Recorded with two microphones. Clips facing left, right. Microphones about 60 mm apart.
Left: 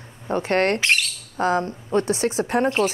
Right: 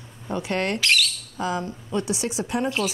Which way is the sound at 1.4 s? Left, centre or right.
Left.